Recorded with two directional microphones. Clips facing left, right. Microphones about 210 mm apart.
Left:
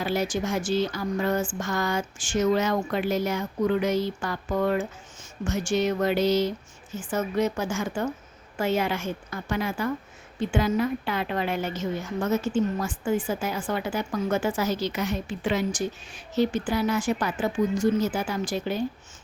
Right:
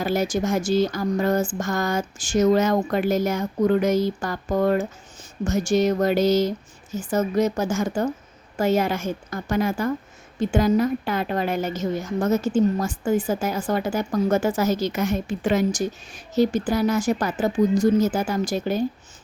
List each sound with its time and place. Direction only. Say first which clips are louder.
0.0 s a woman's voice: right 4 dB; 45° right (ahead or behind)